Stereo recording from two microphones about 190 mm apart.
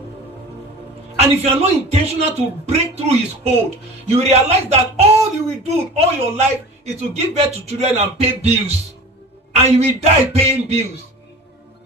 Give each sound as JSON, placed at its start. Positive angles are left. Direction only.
{"t": 1.1, "sound": "a man's voice", "side_deg": -35}